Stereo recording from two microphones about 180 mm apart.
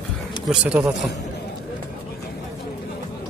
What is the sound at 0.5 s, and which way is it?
Speech, 10° right (ahead or behind).